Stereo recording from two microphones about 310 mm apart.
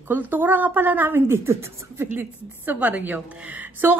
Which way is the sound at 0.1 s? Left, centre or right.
Centre.